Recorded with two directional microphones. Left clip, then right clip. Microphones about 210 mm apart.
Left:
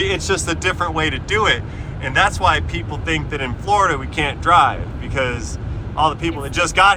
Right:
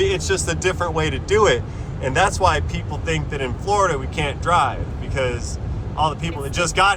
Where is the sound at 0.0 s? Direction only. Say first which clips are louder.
Left 1 dB; 5° right (ahead or behind).